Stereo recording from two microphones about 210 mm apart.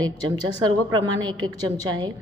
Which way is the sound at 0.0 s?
20° right (ahead or behind).